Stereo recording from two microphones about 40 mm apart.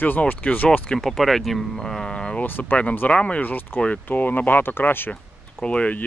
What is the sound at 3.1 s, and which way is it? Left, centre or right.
Speech, left.